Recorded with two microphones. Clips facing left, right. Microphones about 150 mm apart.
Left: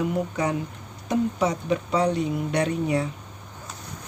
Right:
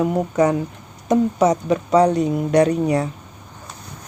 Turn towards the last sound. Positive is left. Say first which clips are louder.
# right 7 dB
turn(degrees=-45)  # may be behind; listen again after turning